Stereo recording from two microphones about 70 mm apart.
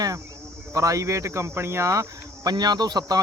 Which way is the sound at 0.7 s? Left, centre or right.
Right.